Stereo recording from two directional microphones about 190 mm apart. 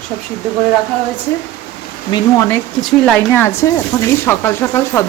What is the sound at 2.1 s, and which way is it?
Speech, 15° left (ahead or behind).